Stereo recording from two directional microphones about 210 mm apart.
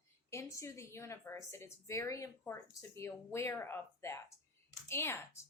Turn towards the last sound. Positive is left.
turn(degrees=10)  # may be behind; listen again after turning